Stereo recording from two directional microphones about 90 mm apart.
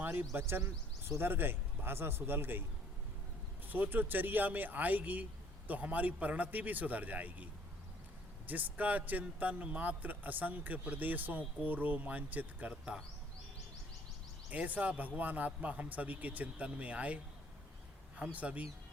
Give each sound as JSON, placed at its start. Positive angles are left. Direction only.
{"t": 0.0, "sound": "a sound", "side_deg": -20}
{"t": 0.3, "sound": "speech", "side_deg": -25}
{"t": 3.7, "sound": "speech", "side_deg": -20}
{"t": 8.4, "sound": "speech", "side_deg": -20}
{"t": 14.5, "sound": "speech", "side_deg": -15}
{"t": 18.2, "sound": "speech", "side_deg": -15}